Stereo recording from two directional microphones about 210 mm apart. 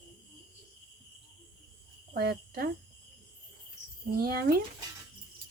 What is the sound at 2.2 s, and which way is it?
Speech, 45° right (ahead or behind).